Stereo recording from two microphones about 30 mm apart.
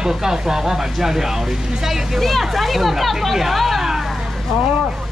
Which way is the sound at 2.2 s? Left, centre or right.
Centre.